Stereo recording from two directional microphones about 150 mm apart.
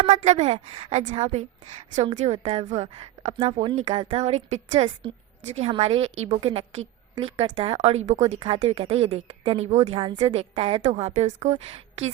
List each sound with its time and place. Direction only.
0.0 s a woman's voice: 40° right (ahead or behind)
8.4 s a woman's voice: 35° right (ahead or behind)